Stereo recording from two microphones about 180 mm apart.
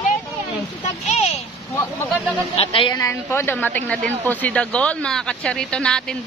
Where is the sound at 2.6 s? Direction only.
30° left (ahead or behind).